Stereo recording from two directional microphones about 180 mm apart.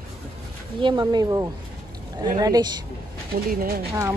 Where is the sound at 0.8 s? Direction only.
25° right (ahead or behind).